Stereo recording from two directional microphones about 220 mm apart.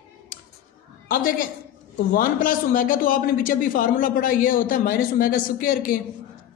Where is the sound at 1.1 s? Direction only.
40° left (ahead or behind).